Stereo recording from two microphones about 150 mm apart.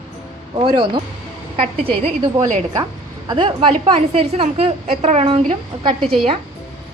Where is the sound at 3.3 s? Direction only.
35° right (ahead or behind).